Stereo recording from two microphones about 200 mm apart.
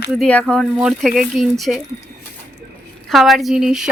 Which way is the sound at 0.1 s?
5° left (ahead or behind).